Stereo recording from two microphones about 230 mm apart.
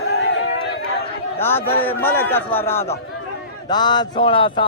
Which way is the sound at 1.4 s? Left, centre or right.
Centre.